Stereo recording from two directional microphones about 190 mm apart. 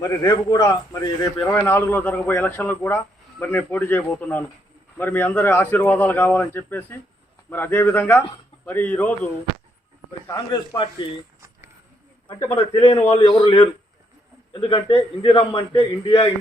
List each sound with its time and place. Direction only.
0.0 s a man's voice: 20° left (ahead or behind)
10.3 s a man's voice: 25° left (ahead or behind)
12.4 s a man's voice: 15° left (ahead or behind)
12.7 s a man's voice: 35° left (ahead or behind)